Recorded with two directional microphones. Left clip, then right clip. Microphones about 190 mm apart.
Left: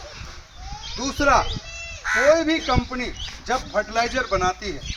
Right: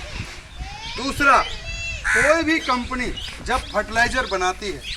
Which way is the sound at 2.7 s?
55° left (ahead or behind).